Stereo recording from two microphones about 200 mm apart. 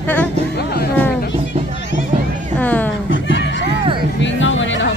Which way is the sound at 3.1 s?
70° left (ahead or behind).